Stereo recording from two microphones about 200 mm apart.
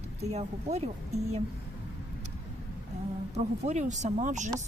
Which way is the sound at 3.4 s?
35° right (ahead or behind).